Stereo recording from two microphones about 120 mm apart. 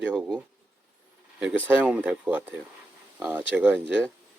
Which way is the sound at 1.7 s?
10° right (ahead or behind).